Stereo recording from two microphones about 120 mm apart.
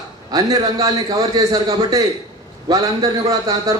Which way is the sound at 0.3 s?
30° right (ahead or behind).